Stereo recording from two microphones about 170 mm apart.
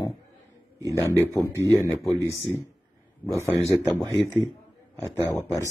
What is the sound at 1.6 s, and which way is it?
Speech, 15° left (ahead or behind).